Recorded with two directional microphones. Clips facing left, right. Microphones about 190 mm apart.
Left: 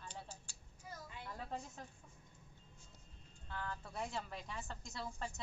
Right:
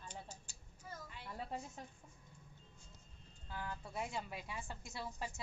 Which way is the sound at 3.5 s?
10° right (ahead or behind).